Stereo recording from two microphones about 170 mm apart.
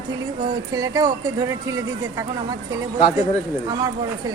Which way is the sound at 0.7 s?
20° right (ahead or behind).